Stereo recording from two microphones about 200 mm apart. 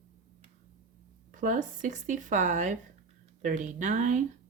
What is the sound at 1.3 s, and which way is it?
Speech, 40° right (ahead or behind).